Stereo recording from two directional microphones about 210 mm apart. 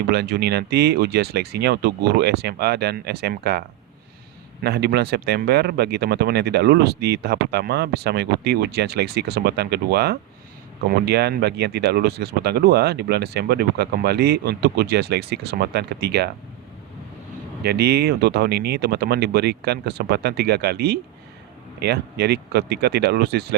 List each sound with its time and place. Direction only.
0.1 s speech: 50° right (ahead or behind)
4.6 s speech: 50° right (ahead or behind)
17.6 s speech: 50° right (ahead or behind)